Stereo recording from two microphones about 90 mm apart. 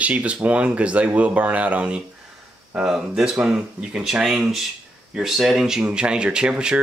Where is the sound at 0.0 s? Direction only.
15° right (ahead or behind).